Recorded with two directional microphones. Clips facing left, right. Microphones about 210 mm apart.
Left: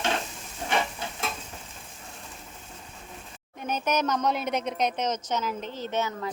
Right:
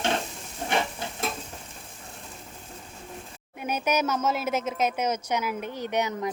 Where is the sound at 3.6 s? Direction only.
10° right (ahead or behind).